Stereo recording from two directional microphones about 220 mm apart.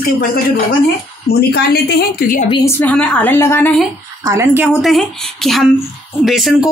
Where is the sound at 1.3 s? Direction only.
45° left (ahead or behind).